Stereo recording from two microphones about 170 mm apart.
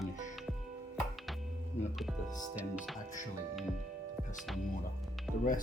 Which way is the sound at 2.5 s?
5° right (ahead or behind).